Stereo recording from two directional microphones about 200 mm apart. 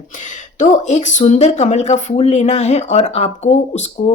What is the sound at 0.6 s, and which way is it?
A woman's voice, 35° left (ahead or behind).